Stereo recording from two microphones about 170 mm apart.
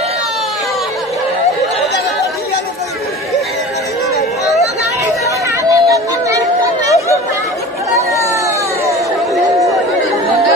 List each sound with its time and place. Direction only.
5.2 s chatter: 20° right (ahead or behind)